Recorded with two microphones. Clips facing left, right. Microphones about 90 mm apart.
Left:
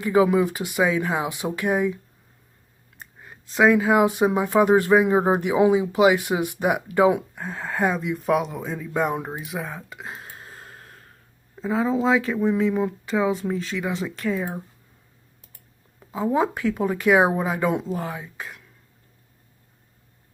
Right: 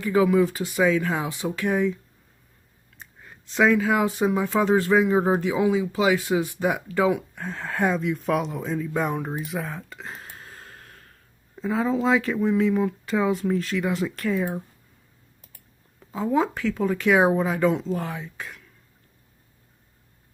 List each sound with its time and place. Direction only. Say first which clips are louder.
0.0 s speech: left 1 dB; 20° left (ahead or behind)
3.5 s speech: left 3 dB; 10° left (ahead or behind)
7.3 s speech: left 1 dB; 5° left (ahead or behind)
10.6 s snort: left 1 dB; 35° left (ahead or behind)
11.6 s speech: left 1 dB; centre (ahead or behind)
16.3 s speech: left 1 dB; 15° left (ahead or behind)
17.9 s speech: even; 5° left (ahead or behind)